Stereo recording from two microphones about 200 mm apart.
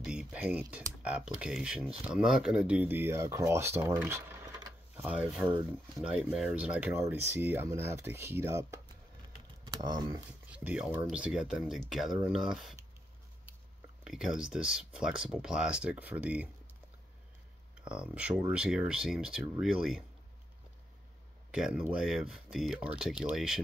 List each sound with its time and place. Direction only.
0.0 s speech: 5° right (ahead or behind)
10.5 s speech: 5° right (ahead or behind)
14.0 s speech: 5° right (ahead or behind)
17.8 s speech: 5° right (ahead or behind)
21.5 s speech: 5° right (ahead or behind)